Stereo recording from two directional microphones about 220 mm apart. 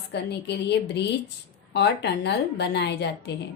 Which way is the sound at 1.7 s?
50° left (ahead or behind).